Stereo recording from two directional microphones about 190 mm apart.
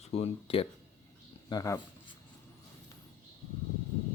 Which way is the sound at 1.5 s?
20° left (ahead or behind).